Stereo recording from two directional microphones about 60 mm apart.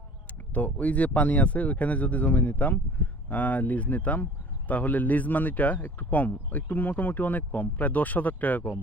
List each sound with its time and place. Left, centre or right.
0.5 s a man's voice: left